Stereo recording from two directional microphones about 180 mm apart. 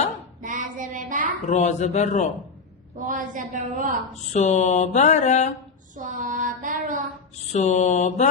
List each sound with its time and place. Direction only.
0.4 s child singing: 45° right (ahead or behind)
1.5 s mantra: 40° left (ahead or behind)
3.1 s a woman's voice: 45° right (ahead or behind)
4.1 s mantra: 40° left (ahead or behind)
6.0 s child singing: 45° right (ahead or behind)
7.5 s mantra: 40° left (ahead or behind)